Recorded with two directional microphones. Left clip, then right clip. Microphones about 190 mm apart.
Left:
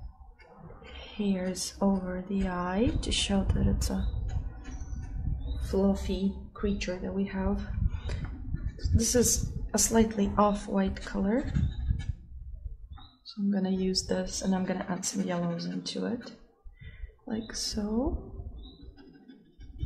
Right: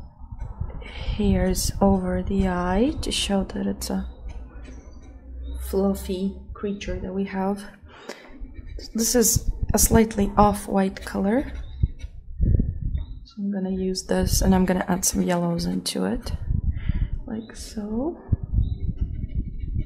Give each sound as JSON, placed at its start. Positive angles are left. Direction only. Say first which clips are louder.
{"t": 0.9, "sound": "a woman's voice", "louder": "right 8 dB", "side_deg": -30}
{"t": 5.7, "sound": "a woman's voice", "louder": "right 5 dB", "side_deg": -25}
{"t": 6.5, "sound": "speech", "louder": "right 1 dB", "side_deg": -15}
{"t": 8.7, "sound": "a woman's voice", "louder": "right 5 dB", "side_deg": -25}
{"t": 13.5, "sound": "speech", "louder": "right 3 dB", "side_deg": -10}
{"t": 14.0, "sound": "speech", "louder": "right 8 dB", "side_deg": -30}
{"t": 17.3, "sound": "speech", "louder": "left 2 dB", "side_deg": -10}